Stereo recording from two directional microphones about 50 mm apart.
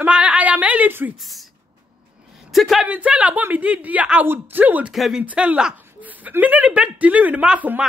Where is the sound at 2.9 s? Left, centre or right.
Right.